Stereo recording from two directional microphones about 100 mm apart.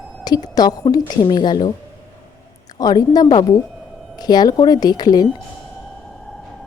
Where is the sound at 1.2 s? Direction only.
50° left (ahead or behind).